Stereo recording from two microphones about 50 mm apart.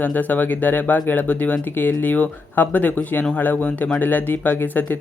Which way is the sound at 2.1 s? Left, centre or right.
Left.